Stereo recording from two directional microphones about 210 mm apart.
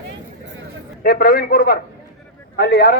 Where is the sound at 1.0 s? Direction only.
45° left (ahead or behind).